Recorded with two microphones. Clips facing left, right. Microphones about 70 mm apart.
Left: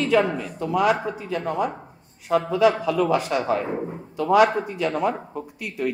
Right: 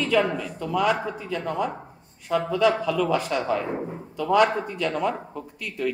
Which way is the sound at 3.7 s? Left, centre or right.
Centre.